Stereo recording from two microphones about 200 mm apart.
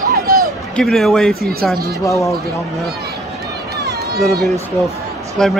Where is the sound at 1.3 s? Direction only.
50° right (ahead or behind).